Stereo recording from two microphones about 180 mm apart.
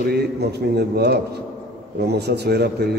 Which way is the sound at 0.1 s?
65° right (ahead or behind).